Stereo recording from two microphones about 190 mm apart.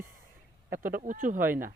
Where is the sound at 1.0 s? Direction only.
45° right (ahead or behind).